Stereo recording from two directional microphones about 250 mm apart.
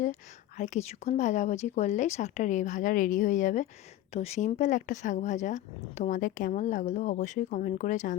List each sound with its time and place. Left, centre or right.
0.0 s speech: left